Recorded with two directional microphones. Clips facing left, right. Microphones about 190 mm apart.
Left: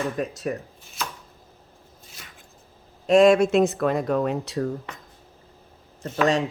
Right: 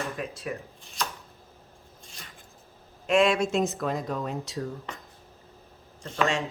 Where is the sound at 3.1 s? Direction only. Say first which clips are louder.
Left 7 dB; 40° left (ahead or behind).